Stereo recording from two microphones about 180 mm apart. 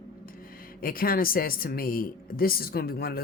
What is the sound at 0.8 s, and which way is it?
Speech, 55° left (ahead or behind).